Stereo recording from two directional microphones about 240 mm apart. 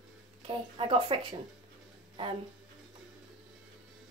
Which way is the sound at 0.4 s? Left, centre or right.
Right.